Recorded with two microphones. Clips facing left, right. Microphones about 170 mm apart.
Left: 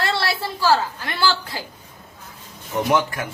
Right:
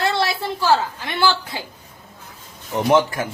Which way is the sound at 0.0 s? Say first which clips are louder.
Right 2 dB; 15° right (ahead or behind).